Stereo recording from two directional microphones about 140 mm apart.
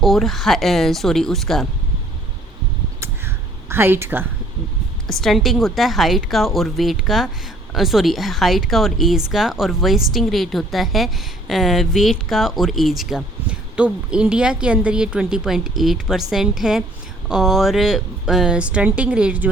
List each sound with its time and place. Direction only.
0.0 s speech: centre (ahead or behind)
3.0 s a sound: 15° right (ahead or behind)
5.0 s speech: centre (ahead or behind)